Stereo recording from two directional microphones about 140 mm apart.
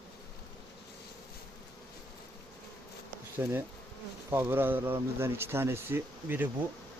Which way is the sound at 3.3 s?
15° right (ahead or behind).